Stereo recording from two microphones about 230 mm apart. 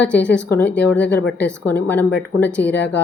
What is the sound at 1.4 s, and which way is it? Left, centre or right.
A woman's voice, centre.